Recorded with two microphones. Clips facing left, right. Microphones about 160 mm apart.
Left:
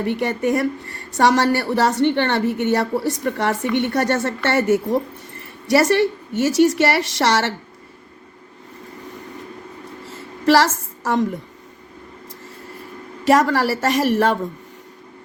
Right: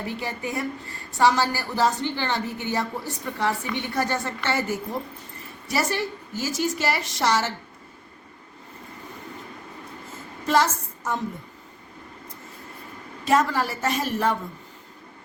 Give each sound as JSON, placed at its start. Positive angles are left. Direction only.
{"t": 0.0, "sound": "a woman's voice", "side_deg": 70}
{"t": 10.1, "sound": "a sound", "side_deg": 85}
{"t": 13.2, "sound": "a woman's voice", "side_deg": 75}